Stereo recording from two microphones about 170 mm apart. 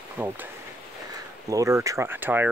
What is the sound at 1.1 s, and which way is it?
Speech, 20° right (ahead or behind).